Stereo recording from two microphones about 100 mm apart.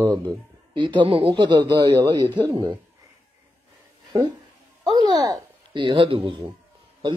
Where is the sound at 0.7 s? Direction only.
55° right (ahead or behind).